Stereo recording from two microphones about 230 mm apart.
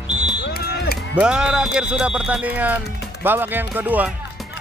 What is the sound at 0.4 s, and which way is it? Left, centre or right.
Music, left.